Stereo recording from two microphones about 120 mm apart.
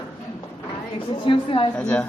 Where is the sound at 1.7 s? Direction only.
10° left (ahead or behind).